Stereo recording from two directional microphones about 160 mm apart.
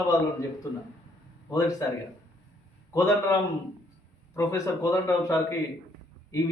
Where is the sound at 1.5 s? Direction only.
20° left (ahead or behind).